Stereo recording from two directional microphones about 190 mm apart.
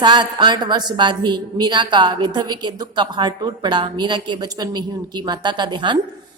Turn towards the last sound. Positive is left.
turn(degrees=-25)  # may be behind; listen again after turning